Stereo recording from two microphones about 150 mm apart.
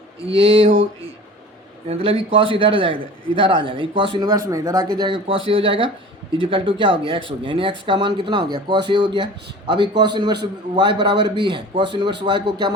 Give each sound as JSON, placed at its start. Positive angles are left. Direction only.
{"t": 1.9, "sound": "speech", "side_deg": -40}